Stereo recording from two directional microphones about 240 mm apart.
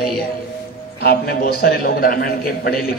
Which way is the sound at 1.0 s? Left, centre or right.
Left.